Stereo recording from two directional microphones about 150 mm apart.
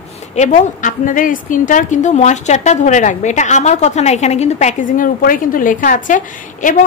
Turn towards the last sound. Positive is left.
turn(degrees=60)  # may be behind; listen again after turning